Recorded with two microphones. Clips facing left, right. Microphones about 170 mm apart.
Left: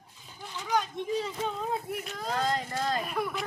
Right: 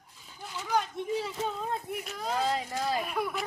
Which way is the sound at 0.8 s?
5° right (ahead or behind).